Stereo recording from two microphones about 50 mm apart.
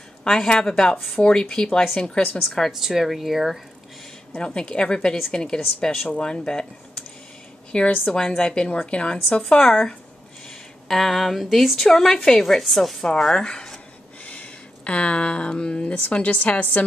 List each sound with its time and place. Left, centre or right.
0.2 s a woman's voice: centre
2.7 s speech: centre
4.3 s a woman's voice: centre
14.2 s speech: left